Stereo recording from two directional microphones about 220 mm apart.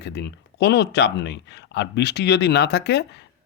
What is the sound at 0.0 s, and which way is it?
Speech, 50° left (ahead or behind).